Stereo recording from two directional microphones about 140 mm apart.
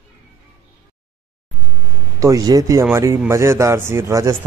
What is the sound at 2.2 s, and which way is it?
Speech, 25° right (ahead or behind).